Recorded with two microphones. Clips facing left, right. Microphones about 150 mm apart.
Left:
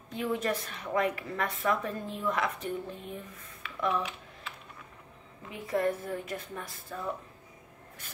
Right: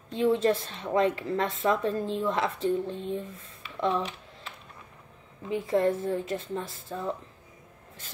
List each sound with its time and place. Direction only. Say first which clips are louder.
0.1 s a woman's voice: right 7 dB; 30° right (ahead or behind)
3.6 s a sound: right 3 dB; 30° right (ahead or behind)
5.5 s a woman's voice: right 5 dB; 30° right (ahead or behind)